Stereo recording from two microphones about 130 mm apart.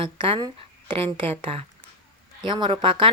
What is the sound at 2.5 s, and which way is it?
Speech, 35° right (ahead or behind).